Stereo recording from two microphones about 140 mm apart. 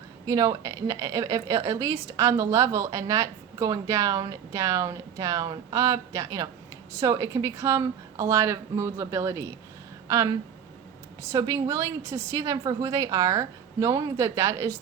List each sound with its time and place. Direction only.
0.3 s a woman's voice: 25° right (ahead or behind)